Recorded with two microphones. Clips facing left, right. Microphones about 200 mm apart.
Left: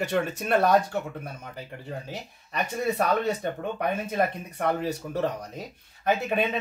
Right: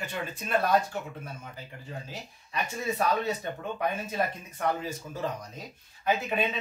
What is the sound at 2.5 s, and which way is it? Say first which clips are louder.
Speech: left 5 dB; 65° left (ahead or behind).